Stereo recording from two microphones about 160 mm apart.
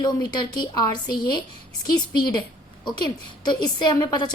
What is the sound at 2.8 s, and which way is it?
A woman's voice, 30° left (ahead or behind).